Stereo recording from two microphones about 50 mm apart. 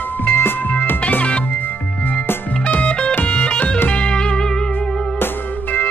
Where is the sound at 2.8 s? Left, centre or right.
Centre.